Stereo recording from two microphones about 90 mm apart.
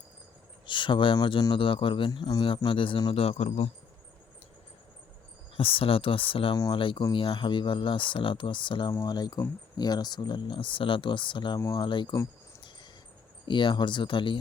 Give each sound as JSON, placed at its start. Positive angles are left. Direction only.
{"t": 0.6, "sound": "speech", "side_deg": 65}
{"t": 2.0, "sound": "speech", "side_deg": 55}
{"t": 3.1, "sound": "a man's voice", "side_deg": 90}
{"t": 5.5, "sound": "speech", "side_deg": 90}
{"t": 6.7, "sound": "speech", "side_deg": 70}
{"t": 9.0, "sound": "speech", "side_deg": 50}
{"t": 13.4, "sound": "speech", "side_deg": 65}